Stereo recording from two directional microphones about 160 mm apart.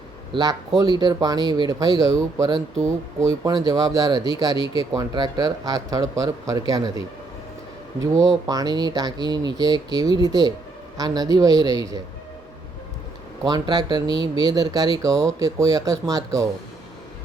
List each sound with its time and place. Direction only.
0.3 s speech: 30° right (ahead or behind)
4.5 s speech: 30° left (ahead or behind)
4.8 s speech: 25° right (ahead or behind)
8.1 s speech: 20° right (ahead or behind)
13.4 s speech: 25° right (ahead or behind)